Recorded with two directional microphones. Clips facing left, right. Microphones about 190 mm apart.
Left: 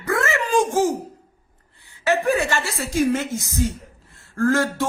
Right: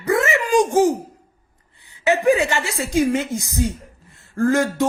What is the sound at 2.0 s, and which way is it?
Speech, 15° right (ahead or behind).